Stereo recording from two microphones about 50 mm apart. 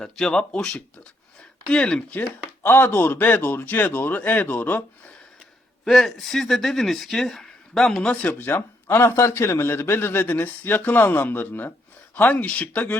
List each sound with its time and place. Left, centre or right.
0.0 s speech: centre
1.7 s speech: left
2.6 s a man's voice: left
5.8 s speech: centre
7.7 s speech: centre
8.4 s speech: left
9.1 s a man's voice: left